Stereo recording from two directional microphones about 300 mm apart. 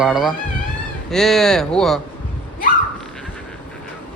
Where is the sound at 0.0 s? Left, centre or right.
Centre.